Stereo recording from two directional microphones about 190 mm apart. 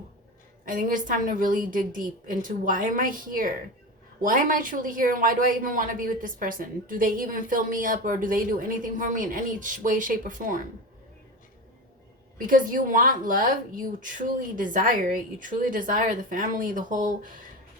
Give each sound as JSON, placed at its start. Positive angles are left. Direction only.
{"t": 0.6, "sound": "speech", "side_deg": -45}
{"t": 12.5, "sound": "speech", "side_deg": -45}